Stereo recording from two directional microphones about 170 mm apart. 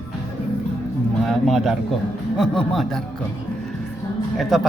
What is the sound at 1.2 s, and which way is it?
Speech, centre (ahead or behind).